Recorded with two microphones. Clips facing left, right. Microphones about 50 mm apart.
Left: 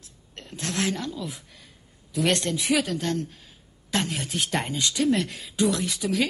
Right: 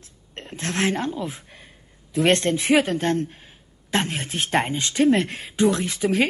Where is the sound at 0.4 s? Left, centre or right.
Right.